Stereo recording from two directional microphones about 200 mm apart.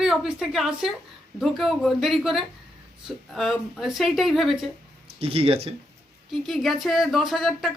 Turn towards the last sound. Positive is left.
turn(degrees=0)  # may be behind; listen again after turning